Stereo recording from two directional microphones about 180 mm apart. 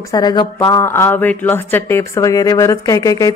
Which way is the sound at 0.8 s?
15° left (ahead or behind).